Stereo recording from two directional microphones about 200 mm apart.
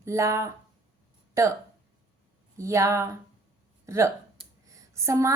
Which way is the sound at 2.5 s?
15° right (ahead or behind).